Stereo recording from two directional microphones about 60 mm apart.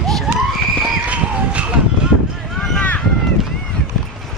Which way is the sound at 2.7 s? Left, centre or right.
Left.